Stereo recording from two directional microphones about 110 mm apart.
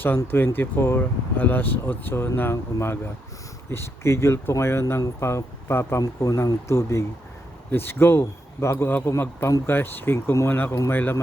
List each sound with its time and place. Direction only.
0.2 s speech: 20° left (ahead or behind)